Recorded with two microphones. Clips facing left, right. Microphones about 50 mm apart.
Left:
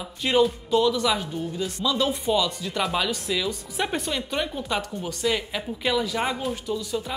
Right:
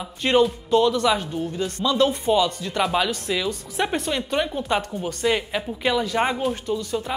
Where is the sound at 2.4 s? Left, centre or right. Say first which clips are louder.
Right 3 dB; right.